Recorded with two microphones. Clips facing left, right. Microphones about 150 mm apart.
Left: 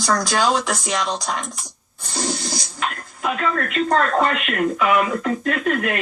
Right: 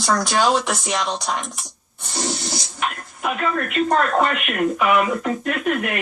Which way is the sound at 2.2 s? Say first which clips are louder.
Left 1 dB; 20° right (ahead or behind).